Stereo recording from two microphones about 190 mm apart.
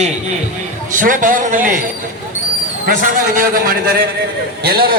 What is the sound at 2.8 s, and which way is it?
A man's voice, 45° right (ahead or behind).